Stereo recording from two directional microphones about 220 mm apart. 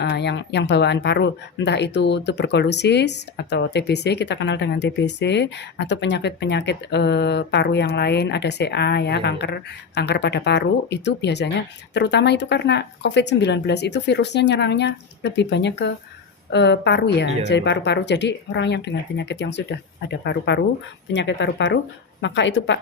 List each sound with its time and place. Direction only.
0.0 s a woman's voice: 50° left (ahead or behind)